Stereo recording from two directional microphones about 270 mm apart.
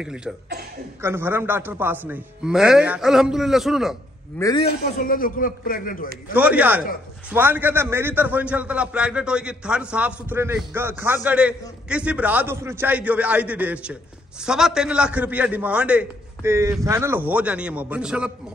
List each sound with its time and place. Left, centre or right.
0.0 s a man's voice: centre
4.4 s a man's voice: centre
5.0 s a man's voice: left
6.3 s a man's voice: centre